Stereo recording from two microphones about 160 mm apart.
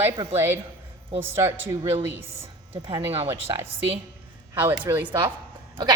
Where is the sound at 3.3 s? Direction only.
15° right (ahead or behind).